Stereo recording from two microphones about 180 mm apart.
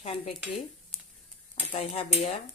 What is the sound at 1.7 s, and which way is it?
Speech, 35° left (ahead or behind).